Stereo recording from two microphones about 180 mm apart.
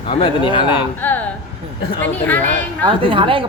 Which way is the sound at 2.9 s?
30° right (ahead or behind).